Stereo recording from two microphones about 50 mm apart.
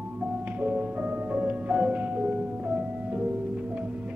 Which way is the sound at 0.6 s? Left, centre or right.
Right.